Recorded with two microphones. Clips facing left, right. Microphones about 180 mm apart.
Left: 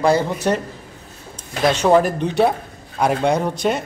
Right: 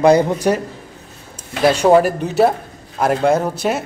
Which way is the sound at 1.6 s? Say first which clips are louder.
Right 3 dB; 10° right (ahead or behind).